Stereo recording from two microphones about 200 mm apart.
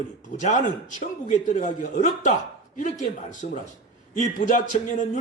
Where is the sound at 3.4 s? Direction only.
40° left (ahead or behind).